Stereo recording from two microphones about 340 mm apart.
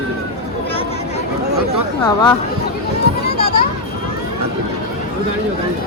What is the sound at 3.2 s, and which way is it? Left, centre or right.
Children playing, left.